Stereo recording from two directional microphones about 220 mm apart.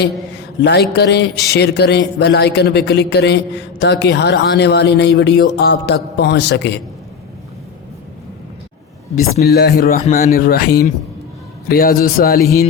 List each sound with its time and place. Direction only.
0.6 s speech: 50° left (ahead or behind)
9.4 s speech: 45° left (ahead or behind)